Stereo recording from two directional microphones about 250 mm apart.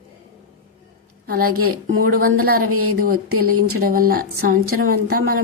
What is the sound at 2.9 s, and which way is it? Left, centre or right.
Speech, right.